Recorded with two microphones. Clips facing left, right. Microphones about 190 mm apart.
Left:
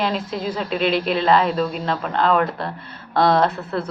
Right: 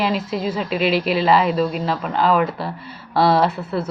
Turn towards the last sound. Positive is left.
turn(degrees=-10)  # may be behind; listen again after turning